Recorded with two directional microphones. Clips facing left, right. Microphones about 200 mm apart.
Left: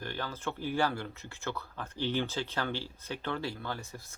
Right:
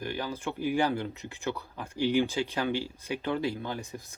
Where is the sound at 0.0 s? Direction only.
15° right (ahead or behind).